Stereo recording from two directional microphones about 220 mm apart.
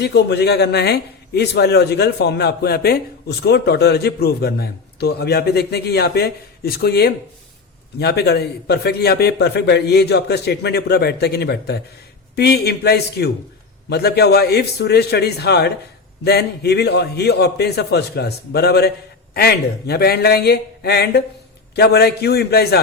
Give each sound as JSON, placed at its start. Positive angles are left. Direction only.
{"t": 0.0, "sound": "a man's voice", "side_deg": 50}